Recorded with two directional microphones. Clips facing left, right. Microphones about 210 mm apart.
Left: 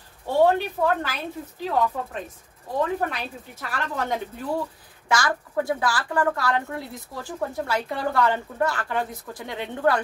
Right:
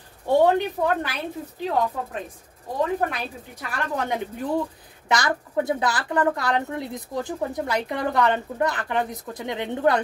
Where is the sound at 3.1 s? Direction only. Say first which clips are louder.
Right 1 dB; 15° right (ahead or behind).